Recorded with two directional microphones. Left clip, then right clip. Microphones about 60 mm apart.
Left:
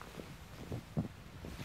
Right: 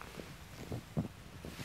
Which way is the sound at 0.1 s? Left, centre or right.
Right.